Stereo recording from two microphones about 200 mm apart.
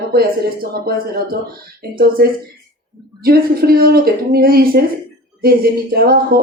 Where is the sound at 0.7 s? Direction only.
50° right (ahead or behind).